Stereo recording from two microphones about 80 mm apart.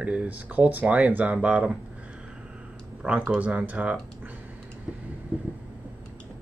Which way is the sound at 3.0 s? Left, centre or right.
Centre.